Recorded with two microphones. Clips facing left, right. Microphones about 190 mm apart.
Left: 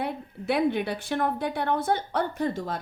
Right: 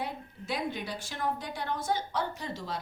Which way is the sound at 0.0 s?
60° left (ahead or behind).